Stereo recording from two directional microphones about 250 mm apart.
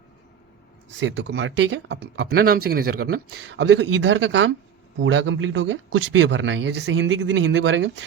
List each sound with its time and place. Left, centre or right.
0.9 s speech: right